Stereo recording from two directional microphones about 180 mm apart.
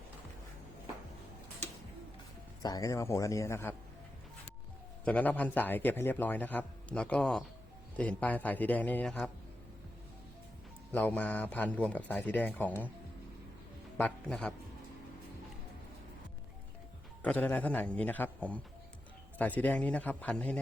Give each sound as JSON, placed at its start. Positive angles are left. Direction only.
{"t": 2.6, "sound": "a man's voice", "side_deg": 20}
{"t": 5.0, "sound": "a man's voice", "side_deg": 10}
{"t": 10.9, "sound": "a man's voice", "side_deg": 10}
{"t": 14.0, "sound": "a man's voice", "side_deg": 5}
{"t": 17.2, "sound": "a man's voice", "side_deg": 10}